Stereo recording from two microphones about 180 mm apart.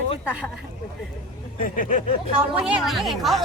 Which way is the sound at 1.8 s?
45° left (ahead or behind).